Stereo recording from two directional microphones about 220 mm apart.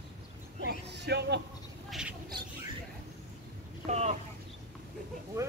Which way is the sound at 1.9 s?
5° right (ahead or behind).